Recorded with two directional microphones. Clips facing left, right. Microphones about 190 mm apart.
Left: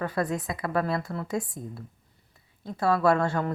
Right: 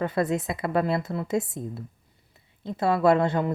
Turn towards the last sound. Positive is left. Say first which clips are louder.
# right 3 dB
turn(degrees=-20)  # may be behind; listen again after turning